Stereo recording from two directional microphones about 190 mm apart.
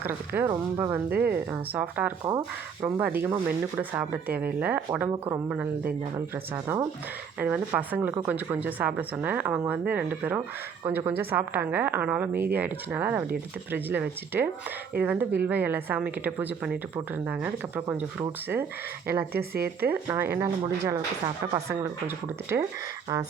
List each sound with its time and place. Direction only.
0.0 s speech: 10° right (ahead or behind)
19.3 s speech: 55° right (ahead or behind)
19.9 s speech: 10° right (ahead or behind)